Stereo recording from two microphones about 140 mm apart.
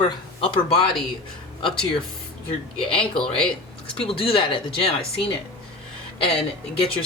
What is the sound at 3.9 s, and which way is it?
Speech, 40° left (ahead or behind).